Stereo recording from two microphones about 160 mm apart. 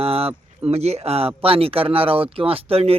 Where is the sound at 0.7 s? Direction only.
40° right (ahead or behind).